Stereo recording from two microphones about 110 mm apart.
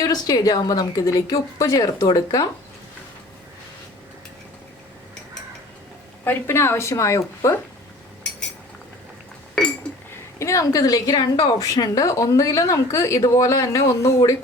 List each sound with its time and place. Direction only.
0.0 s a woman's voice: 35° left (ahead or behind)
6.2 s speech: 20° left (ahead or behind)
9.6 s chink: 5° left (ahead or behind)
10.3 s a woman's voice: 30° left (ahead or behind)